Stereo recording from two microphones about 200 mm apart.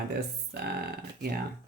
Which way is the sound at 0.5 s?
50° right (ahead or behind).